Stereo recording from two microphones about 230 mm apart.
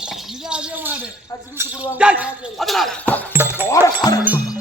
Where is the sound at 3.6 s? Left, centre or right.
Centre.